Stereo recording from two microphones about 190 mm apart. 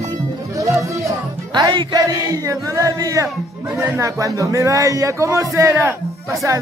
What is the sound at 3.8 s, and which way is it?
A man's voice, 15° right (ahead or behind).